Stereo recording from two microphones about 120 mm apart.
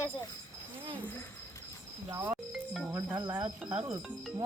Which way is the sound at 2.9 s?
20° right (ahead or behind).